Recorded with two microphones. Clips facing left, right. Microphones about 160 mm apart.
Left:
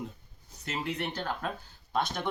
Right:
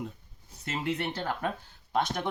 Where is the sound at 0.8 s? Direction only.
25° right (ahead or behind).